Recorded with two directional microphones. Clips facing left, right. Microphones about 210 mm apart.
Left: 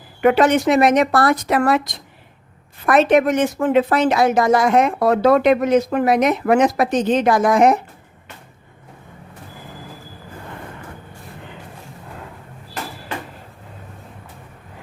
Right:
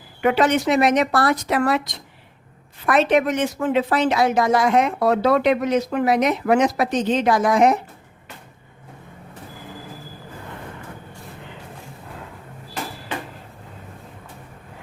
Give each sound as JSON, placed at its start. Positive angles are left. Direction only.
{"t": 0.2, "sound": "speech", "side_deg": 50}